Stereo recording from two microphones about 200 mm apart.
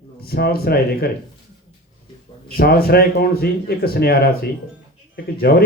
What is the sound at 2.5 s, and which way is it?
Speech, 50° left (ahead or behind).